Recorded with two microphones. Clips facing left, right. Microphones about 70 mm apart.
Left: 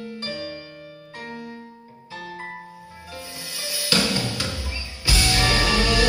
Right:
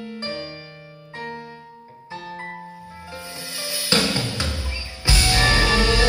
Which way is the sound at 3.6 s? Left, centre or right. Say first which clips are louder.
Right 1 dB; right.